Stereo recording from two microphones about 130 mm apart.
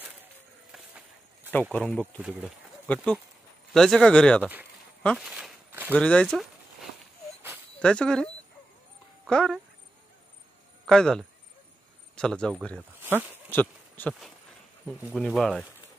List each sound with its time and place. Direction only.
0.7 s music: 5° right (ahead or behind)
1.5 s speech: 10° left (ahead or behind)
2.1 s speech: 10° right (ahead or behind)
2.9 s speech: 10° left (ahead or behind)
5.9 s speech: 10° left (ahead or behind)
10.9 s speech: 5° left (ahead or behind)
13.0 s speech: 15° right (ahead or behind)
13.5 s a sound: 15° left (ahead or behind)
15.1 s speech: centre (ahead or behind)